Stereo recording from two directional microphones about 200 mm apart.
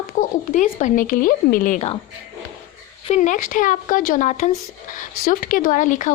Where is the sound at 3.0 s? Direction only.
35° left (ahead or behind).